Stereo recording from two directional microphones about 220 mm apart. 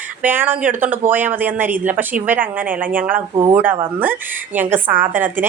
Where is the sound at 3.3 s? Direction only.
20° right (ahead or behind).